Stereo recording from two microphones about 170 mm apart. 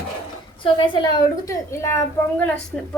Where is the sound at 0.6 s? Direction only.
30° left (ahead or behind); by 2.5 s 10° left (ahead or behind).